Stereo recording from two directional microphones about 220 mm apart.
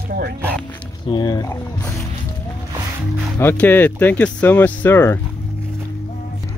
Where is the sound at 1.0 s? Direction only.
20° left (ahead or behind).